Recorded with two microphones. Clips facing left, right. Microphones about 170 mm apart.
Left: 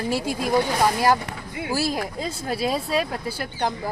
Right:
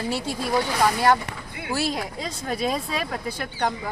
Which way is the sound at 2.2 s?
5° left (ahead or behind).